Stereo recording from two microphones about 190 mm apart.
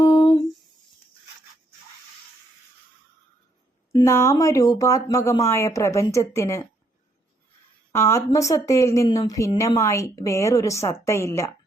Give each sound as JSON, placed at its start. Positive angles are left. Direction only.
{"t": 0.0, "sound": "a sound", "side_deg": 20}
{"t": 3.9, "sound": "a woman's voice", "side_deg": 15}
{"t": 7.9, "sound": "a woman's voice", "side_deg": 15}